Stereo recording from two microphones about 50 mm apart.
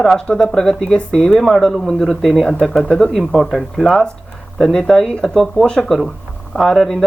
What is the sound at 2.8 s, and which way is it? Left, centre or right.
Speech, centre.